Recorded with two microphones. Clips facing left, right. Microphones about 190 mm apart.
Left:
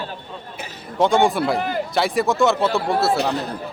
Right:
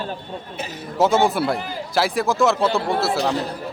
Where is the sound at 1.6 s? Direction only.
60° left (ahead or behind).